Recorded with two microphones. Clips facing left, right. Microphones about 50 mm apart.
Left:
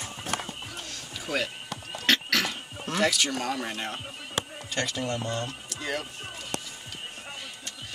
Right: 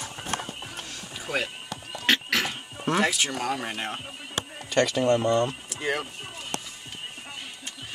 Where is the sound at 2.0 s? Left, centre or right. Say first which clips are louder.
Right 1 dB; centre.